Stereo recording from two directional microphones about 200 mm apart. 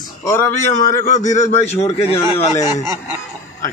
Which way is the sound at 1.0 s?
40° left (ahead or behind).